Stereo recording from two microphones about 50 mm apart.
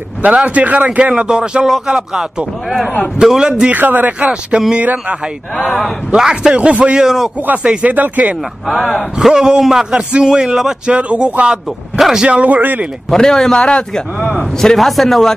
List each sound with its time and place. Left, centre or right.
0.2 s speech: right
1.1 s a man's voice: centre
3.7 s speech: right
4.3 s speech: centre
6.1 s a man's voice: centre
6.5 s speech: right
7.9 s speech: right
8.6 s speech: centre
9.3 s a man's voice: centre
10.9 s speech: right
12.0 s a sound: centre
12.3 s speech: right
13.1 s a man's voice: centre
14.8 s speech: centre